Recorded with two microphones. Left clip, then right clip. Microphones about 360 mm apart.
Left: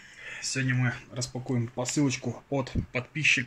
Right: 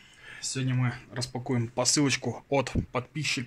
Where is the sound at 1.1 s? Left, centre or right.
Right.